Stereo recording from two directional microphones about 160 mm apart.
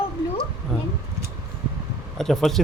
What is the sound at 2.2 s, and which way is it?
Speech, centre (ahead or behind).